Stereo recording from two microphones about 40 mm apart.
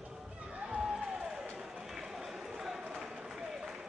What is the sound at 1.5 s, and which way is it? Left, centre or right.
Run, centre.